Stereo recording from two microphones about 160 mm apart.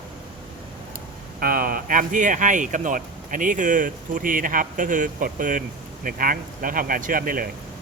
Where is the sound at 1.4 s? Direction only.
65° right (ahead or behind).